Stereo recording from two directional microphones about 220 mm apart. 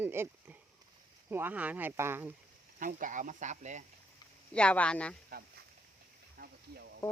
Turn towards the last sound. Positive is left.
turn(degrees=-50)  # may be behind; listen again after turning